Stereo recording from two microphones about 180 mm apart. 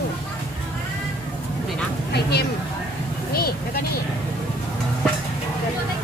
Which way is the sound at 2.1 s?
65° left (ahead or behind).